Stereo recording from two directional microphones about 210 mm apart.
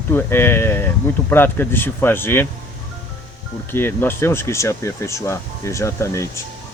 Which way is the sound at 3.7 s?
10° left (ahead or behind).